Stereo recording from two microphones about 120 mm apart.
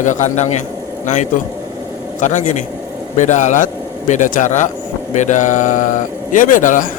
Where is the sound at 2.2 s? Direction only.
90° left.